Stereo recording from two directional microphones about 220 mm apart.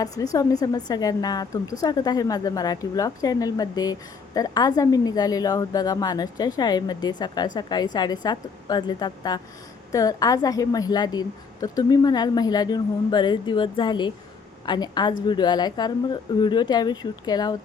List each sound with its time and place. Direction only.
0.0 s a woman's voice: 15° left (ahead or behind)